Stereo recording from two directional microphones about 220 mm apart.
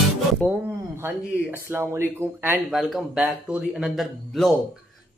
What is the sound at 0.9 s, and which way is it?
Speech, 10° right (ahead or behind).